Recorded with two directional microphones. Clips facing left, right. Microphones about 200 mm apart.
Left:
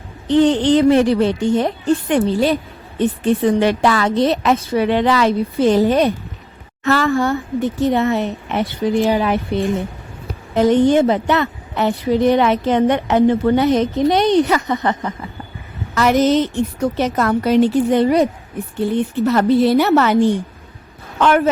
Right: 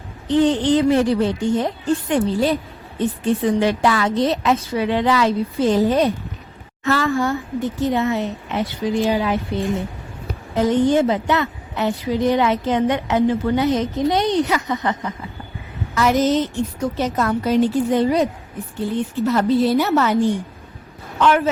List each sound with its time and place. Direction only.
0.3 s a woman's voice: 70° left (ahead or behind)
21.2 s a woman's voice: 55° left (ahead or behind)